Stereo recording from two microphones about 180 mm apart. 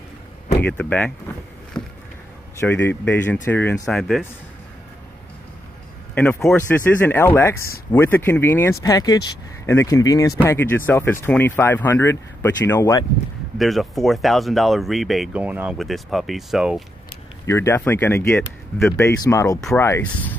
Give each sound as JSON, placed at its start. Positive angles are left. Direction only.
{"t": 0.6, "sound": "speech", "side_deg": 10}
{"t": 2.6, "sound": "speech", "side_deg": 10}
{"t": 6.1, "sound": "speech", "side_deg": 10}
{"t": 13.6, "sound": "speech", "side_deg": 0}
{"t": 17.5, "sound": "speech", "side_deg": 15}